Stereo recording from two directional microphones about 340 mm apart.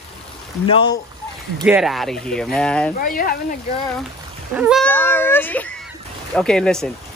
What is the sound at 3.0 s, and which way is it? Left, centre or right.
Speech, left.